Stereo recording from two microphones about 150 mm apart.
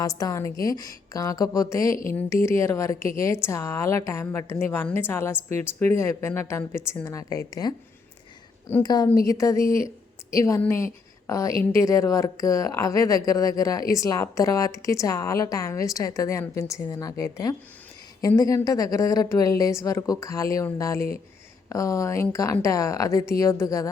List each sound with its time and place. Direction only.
0.0 s a woman's voice: 25° left (ahead or behind)
8.8 s speech: 25° left (ahead or behind)